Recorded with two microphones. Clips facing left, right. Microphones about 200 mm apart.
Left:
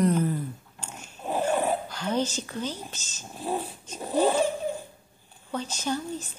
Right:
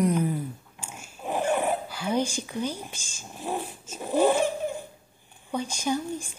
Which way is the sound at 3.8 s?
10° right (ahead or behind).